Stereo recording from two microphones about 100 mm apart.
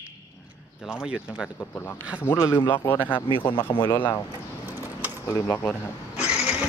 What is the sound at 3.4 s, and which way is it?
Speech, 55° left (ahead or behind).